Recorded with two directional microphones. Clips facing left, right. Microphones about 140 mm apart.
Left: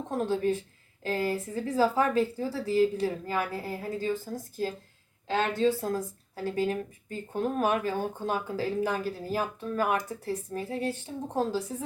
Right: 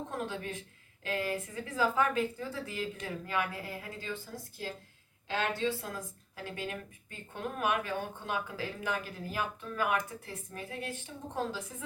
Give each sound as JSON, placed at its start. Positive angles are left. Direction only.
{"t": 0.1, "sound": "a woman's voice", "side_deg": 35}